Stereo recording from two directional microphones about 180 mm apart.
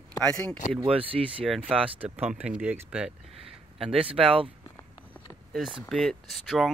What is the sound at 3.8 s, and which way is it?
Speech, 30° right (ahead or behind).